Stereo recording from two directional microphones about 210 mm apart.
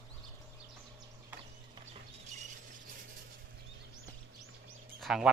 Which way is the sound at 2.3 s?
35° right (ahead or behind).